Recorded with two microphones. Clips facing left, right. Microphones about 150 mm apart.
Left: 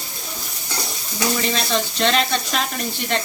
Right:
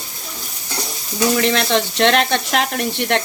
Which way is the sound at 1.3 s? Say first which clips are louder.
Right 5 dB; 65° right (ahead or behind).